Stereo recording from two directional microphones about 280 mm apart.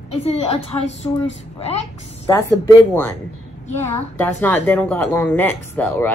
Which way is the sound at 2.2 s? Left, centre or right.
Centre.